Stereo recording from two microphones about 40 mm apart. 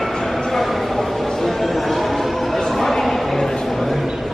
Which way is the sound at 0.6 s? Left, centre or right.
Centre.